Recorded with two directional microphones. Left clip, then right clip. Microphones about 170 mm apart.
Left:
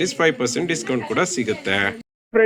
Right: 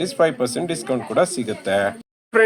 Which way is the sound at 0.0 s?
45° right (ahead or behind).